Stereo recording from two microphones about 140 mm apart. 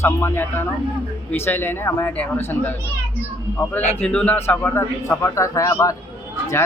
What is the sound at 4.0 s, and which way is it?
A man's voice, 10° left (ahead or behind).